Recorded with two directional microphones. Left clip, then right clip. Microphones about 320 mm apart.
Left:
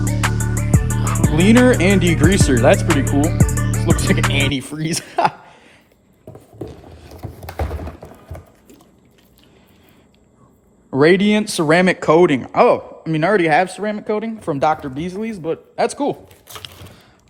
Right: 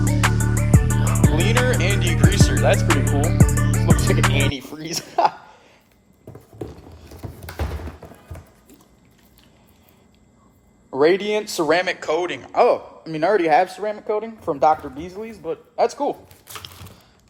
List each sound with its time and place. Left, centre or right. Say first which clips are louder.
0.0 s music: even; centre
1.8 s speech: left 6 dB; left
2.7 s music: left 3 dB; centre
4.5 s a sound: left 5 dB; left
7.1 s a sound: left 3 dB; centre
11.0 s speech: left 4 dB; left